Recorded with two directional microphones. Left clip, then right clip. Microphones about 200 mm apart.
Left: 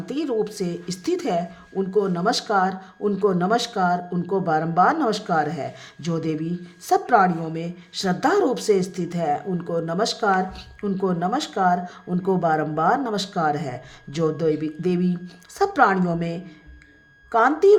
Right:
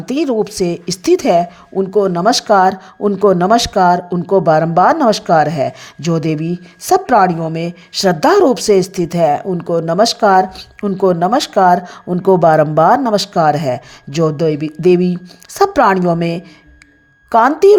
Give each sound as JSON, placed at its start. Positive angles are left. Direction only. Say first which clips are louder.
{"t": 0.0, "sound": "a woman's voice", "louder": "right 9 dB", "side_deg": -40}